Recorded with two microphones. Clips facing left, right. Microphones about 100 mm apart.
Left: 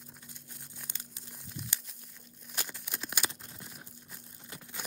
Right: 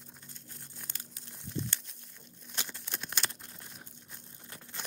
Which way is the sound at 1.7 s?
5° left (ahead or behind).